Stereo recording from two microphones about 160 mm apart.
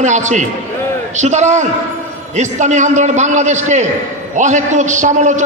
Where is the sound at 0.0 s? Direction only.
50° right (ahead or behind).